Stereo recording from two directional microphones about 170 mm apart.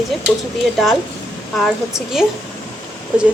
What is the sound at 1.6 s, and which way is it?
Speech, centre (ahead or behind).